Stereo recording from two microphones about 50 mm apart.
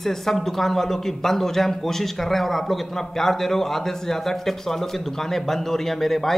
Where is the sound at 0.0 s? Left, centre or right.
Centre.